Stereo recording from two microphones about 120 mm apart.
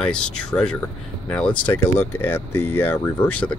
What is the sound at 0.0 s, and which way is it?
Speech, 5° left (ahead or behind).